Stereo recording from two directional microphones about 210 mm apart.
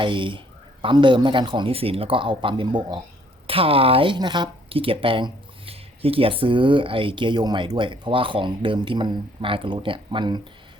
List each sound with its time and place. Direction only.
0.0 s speech: 25° right (ahead or behind)